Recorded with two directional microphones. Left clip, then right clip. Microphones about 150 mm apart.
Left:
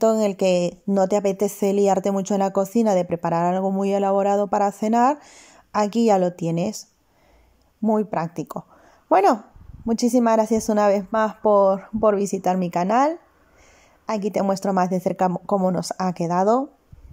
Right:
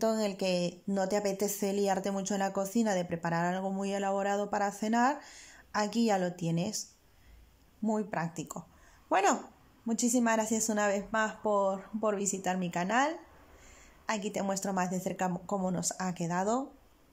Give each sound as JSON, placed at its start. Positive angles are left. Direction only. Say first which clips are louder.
{"t": 0.0, "sound": "a woman's voice", "louder": "left 12 dB", "side_deg": 25}